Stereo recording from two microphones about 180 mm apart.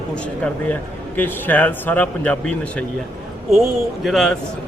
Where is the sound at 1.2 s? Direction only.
10° left (ahead or behind).